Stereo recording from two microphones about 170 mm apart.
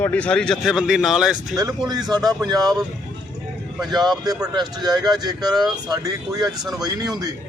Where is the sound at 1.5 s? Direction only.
20° right (ahead or behind).